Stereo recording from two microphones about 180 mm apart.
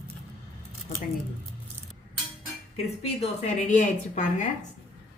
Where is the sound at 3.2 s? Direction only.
40° left (ahead or behind).